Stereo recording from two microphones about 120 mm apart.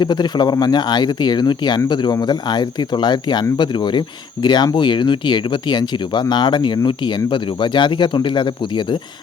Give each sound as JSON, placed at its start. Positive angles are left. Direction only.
{"t": 0.0, "sound": "speech", "side_deg": 35}